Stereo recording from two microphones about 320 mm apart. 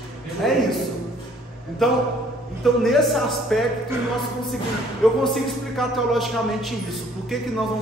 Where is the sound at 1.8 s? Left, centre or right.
Centre.